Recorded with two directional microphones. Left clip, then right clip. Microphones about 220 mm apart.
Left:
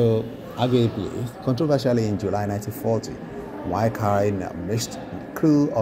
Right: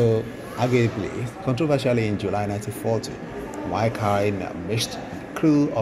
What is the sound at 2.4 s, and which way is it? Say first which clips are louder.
Speech: even; 5° left (ahead or behind).